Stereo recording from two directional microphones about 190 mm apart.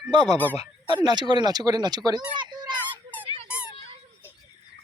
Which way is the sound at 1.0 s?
20° right (ahead or behind).